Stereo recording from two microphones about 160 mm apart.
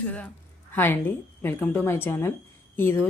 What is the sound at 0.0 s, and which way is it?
A woman's voice, 10° left (ahead or behind).